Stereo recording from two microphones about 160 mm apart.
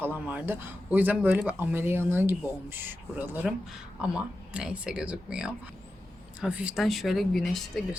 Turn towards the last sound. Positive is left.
turn(degrees=0)  # may be behind; listen again after turning